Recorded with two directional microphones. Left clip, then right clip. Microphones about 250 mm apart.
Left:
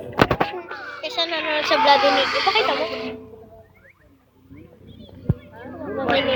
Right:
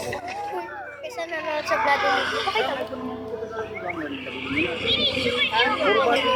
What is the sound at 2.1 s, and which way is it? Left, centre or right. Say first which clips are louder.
Speech: left 4 dB; right.